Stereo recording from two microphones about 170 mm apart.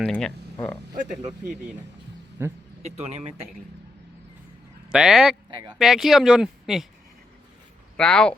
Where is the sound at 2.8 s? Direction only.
40° right (ahead or behind).